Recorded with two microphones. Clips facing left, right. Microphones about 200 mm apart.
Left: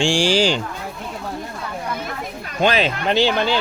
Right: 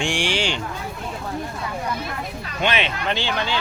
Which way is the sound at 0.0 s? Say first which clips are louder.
Left 6 dB; 30° left (ahead or behind).